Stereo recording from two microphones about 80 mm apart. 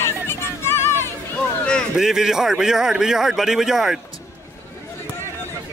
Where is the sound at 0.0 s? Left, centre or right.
Left.